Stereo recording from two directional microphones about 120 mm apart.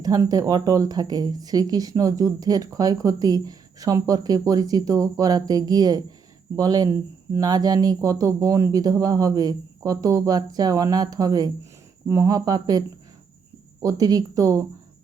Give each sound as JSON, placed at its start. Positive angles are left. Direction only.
{"t": 0.0, "sound": "speech", "side_deg": -30}
{"t": 13.8, "sound": "speech", "side_deg": -30}